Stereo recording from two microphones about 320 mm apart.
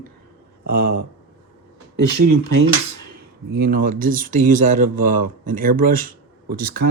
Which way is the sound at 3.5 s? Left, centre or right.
Right.